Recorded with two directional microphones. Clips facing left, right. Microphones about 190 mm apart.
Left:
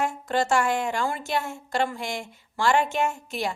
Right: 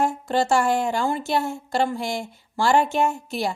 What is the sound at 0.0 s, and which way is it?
A woman's voice, 30° right (ahead or behind).